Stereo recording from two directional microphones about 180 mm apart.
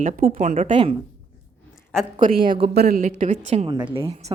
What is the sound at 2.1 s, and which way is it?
Speech, 50° right (ahead or behind).